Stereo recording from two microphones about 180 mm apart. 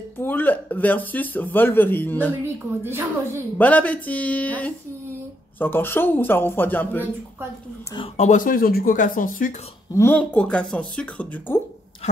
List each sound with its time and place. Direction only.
0.2 s speech: 10° left (ahead or behind)
2.4 s a woman's voice: 15° right (ahead or behind)
3.5 s speech: 10° left (ahead or behind)
7.9 s speech: 30° left (ahead or behind)
8.3 s speech: 50° left (ahead or behind)
9.9 s speech: 10° left (ahead or behind)